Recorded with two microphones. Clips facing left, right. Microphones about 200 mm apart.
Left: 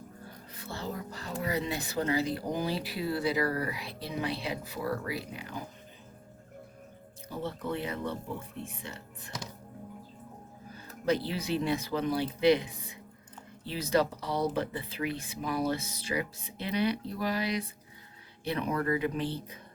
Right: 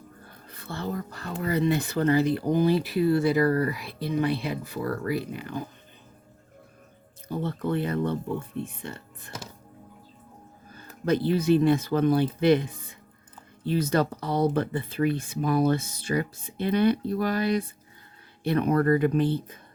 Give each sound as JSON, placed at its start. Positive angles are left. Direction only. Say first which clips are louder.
{"t": 0.5, "sound": "speech", "louder": "right 6 dB", "side_deg": -60}
{"t": 7.3, "sound": "speech", "louder": "right 6 dB", "side_deg": -55}
{"t": 11.0, "sound": "speech", "louder": "right 7 dB", "side_deg": -55}